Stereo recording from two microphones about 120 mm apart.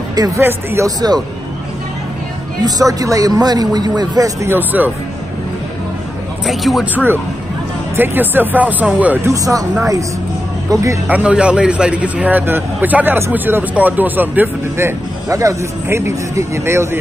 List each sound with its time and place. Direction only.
0.4 s speech: 20° right (ahead or behind)
0.8 s speech: 35° right (ahead or behind)
2.6 s speech: 30° right (ahead or behind)
4.5 s a man's voice: 15° right (ahead or behind)
6.4 s speech: centre (ahead or behind)
7.9 s a man's voice: 15° right (ahead or behind)
9.3 s speech: 30° right (ahead or behind)
10.7 s speech: 25° right (ahead or behind)
11.1 s a man's voice: 10° right (ahead or behind)